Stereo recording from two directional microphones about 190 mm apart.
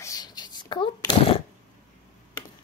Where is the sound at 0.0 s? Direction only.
20° left (ahead or behind).